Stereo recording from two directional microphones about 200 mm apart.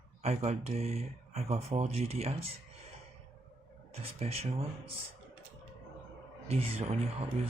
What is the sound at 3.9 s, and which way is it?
Speech, 30° right (ahead or behind).